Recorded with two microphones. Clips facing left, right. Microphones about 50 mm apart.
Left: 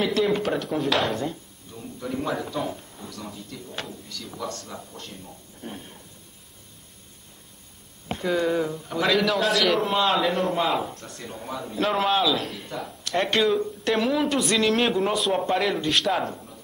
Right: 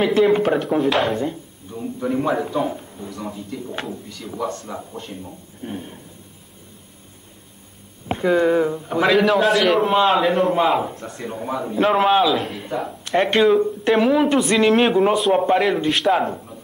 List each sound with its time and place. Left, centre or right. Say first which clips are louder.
0.0 s a man's voice: right 7 dB; right
0.7 s a man's voice: right 5 dB; centre
8.1 s a man's voice: right 7 dB; right
9.1 s a man's voice: right 6 dB; centre